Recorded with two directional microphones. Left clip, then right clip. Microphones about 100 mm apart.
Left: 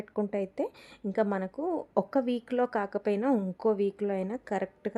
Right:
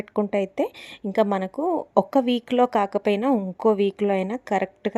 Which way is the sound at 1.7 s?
5° right (ahead or behind).